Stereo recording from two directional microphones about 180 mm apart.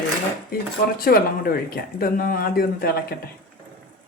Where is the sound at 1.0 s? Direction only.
55° left (ahead or behind).